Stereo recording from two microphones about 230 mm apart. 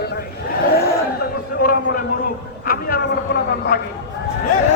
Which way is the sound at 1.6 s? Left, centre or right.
Left.